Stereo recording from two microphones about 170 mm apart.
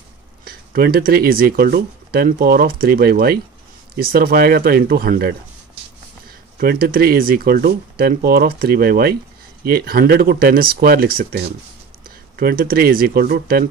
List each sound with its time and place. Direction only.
0.5 s speech: 60° right (ahead or behind)
6.6 s speech: 60° right (ahead or behind)